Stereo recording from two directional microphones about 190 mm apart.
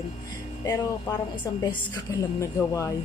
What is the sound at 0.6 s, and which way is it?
A woman's voice, 20° left (ahead or behind).